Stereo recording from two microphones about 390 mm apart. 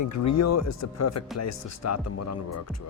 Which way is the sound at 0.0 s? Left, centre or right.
Left.